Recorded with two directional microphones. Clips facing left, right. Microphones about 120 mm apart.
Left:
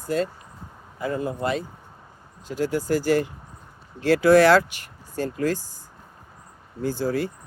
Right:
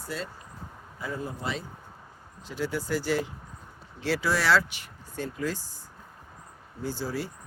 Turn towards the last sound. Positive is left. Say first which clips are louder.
# left 7 dB
turn(degrees=55)  # may be behind; listen again after turning